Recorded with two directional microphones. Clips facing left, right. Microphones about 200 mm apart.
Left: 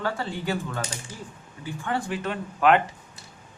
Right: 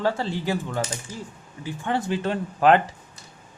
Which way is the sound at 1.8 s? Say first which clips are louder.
Right 4 dB; 25° right (ahead or behind).